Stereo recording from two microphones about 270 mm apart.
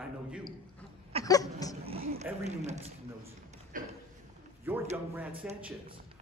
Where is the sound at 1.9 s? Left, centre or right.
Right.